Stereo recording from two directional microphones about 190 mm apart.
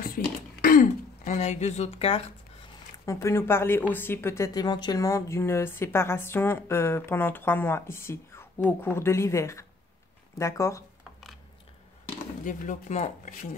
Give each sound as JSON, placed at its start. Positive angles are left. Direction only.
{"t": 0.1, "sound": "throat clearing", "side_deg": 50}
{"t": 3.1, "sound": "speech", "side_deg": 15}
{"t": 12.4, "sound": "speech", "side_deg": 40}